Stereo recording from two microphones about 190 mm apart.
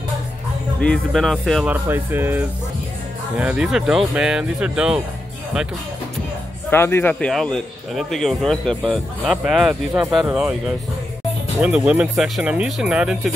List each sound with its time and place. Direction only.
0.7 s a man's voice: 5° left (ahead or behind)
6.7 s a man's voice: 10° left (ahead or behind); by 10.5 s 5° right (ahead or behind)
11.6 s a man's voice: 5° right (ahead or behind)